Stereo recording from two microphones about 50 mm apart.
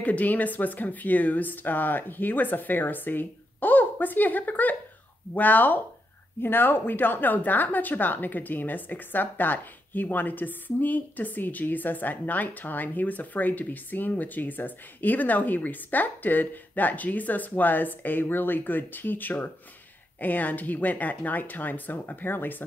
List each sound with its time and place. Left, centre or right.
0.0 s a woman's voice: left